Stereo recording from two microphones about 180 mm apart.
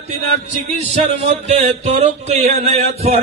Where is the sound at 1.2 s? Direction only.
35° right (ahead or behind).